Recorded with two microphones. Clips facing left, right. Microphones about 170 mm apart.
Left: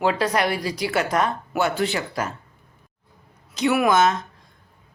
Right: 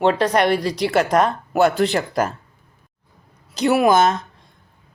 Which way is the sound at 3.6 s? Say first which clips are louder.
Right 3 dB; 35° right (ahead or behind).